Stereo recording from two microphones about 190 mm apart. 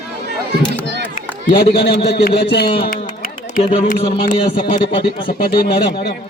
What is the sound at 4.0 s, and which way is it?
Speech, 40° left (ahead or behind).